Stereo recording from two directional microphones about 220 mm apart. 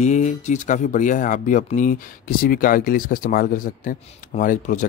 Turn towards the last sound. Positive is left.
turn(degrees=35)  # may be behind; listen again after turning